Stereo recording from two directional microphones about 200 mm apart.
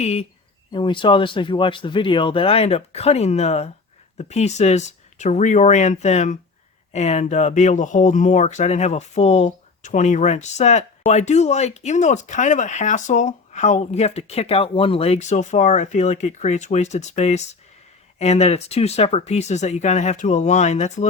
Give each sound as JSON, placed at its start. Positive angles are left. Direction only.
{"t": 0.0, "sound": "speech", "side_deg": 30}